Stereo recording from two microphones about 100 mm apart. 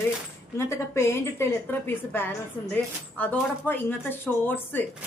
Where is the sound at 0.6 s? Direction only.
30° left (ahead or behind).